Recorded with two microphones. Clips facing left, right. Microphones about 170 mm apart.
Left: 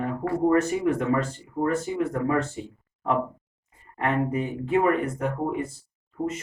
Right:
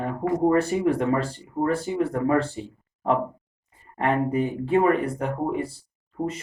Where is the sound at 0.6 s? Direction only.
30° right (ahead or behind).